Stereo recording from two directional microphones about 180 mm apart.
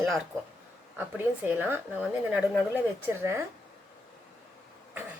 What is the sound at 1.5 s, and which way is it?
A woman's voice, 10° right (ahead or behind).